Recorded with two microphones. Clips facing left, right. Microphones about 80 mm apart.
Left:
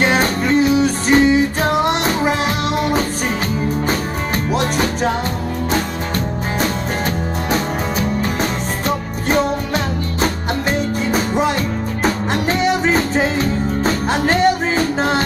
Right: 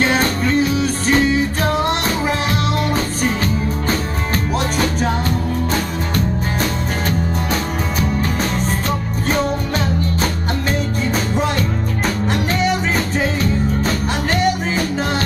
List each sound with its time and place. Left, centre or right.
0.0 s music: left
4.5 s music: centre
8.2 s music: centre
11.1 s music: centre
12.0 s music: left